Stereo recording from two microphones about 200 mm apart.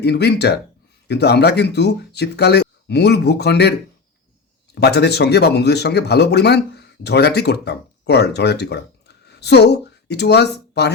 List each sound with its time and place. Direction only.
0.0 s speech: 55° left (ahead or behind)